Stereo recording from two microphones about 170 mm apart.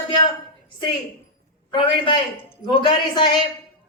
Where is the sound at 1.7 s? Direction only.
30° left (ahead or behind).